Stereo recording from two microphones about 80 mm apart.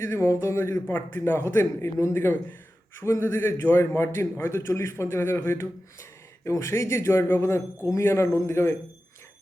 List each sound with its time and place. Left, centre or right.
0.0 s a man's voice: left